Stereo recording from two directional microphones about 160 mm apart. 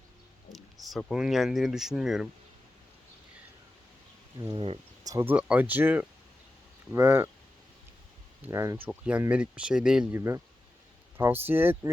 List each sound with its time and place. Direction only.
0.5 s speech: centre (ahead or behind)
4.4 s speech: 35° right (ahead or behind)
5.0 s speech: 15° right (ahead or behind)
8.4 s speech: 20° right (ahead or behind)
8.9 s speech: 10° right (ahead or behind)